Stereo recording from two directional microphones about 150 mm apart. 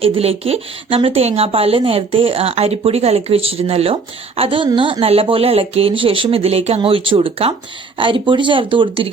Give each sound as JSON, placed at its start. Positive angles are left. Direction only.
{"t": 0.0, "sound": "speech", "side_deg": -40}